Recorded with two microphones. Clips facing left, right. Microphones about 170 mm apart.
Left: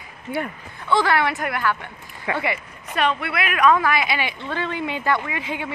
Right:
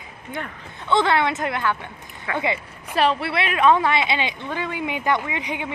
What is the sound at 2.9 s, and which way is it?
A woman's voice, 30° right (ahead or behind).